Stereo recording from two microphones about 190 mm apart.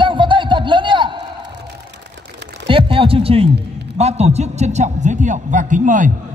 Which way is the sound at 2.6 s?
30° right (ahead or behind).